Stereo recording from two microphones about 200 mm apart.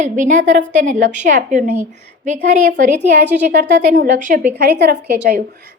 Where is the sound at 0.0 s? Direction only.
40° right (ahead or behind).